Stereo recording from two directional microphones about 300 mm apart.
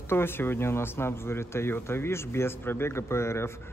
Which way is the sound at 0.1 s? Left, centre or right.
Centre.